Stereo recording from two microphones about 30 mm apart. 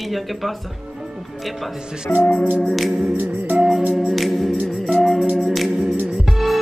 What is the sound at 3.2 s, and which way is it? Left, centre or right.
Music, right.